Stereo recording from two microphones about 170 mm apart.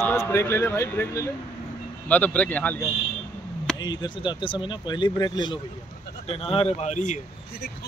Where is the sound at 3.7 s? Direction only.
25° left (ahead or behind); by 7.2 s 45° left (ahead or behind).